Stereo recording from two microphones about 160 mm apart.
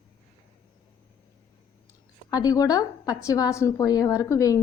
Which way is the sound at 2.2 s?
25° left (ahead or behind).